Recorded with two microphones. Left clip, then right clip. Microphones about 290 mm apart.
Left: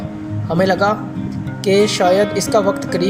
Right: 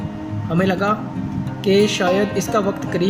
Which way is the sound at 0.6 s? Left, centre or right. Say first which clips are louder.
Left 4 dB; centre.